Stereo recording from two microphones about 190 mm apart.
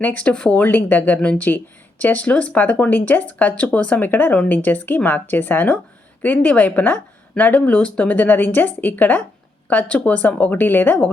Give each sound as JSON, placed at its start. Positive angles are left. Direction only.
{"t": 0.0, "sound": "speech", "side_deg": 10}